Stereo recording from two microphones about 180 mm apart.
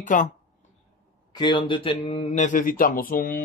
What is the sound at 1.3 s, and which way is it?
Speech, 25° left (ahead or behind).